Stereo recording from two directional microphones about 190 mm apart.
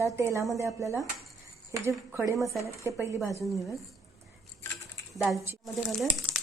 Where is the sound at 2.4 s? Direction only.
15° left (ahead or behind).